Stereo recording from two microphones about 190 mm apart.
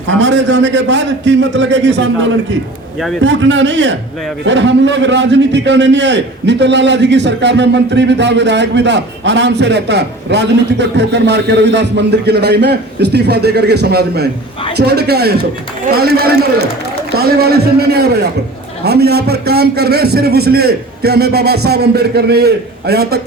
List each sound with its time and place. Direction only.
0.1 s a man's voice: 70° right (ahead or behind)